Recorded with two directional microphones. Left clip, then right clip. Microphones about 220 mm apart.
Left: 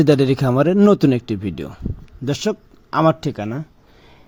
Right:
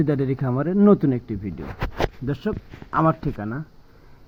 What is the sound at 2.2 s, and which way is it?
Speech, 30° left (ahead or behind).